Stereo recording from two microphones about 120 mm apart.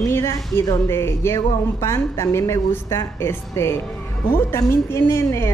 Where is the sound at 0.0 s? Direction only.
25° left (ahead or behind).